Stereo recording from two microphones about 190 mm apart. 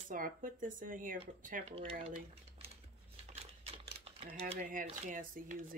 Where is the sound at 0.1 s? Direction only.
45° right (ahead or behind).